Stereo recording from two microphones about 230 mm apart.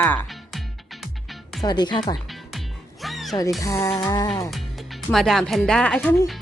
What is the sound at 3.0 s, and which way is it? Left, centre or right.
Music, centre.